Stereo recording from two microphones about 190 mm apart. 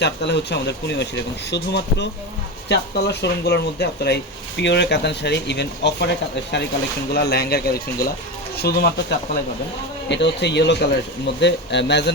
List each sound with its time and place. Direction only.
0.0 s speech: 65° left (ahead or behind)
7.1 s speech: 60° left (ahead or behind)